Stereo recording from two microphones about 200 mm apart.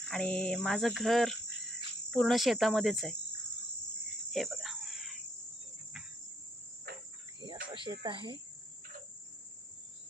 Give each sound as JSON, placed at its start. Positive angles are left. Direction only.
{"t": 0.1, "sound": "cricket", "side_deg": 5}
{"t": 4.3, "sound": "cricket", "side_deg": 0}
{"t": 6.9, "sound": "cricket", "side_deg": -55}
{"t": 7.4, "sound": "cricket", "side_deg": -20}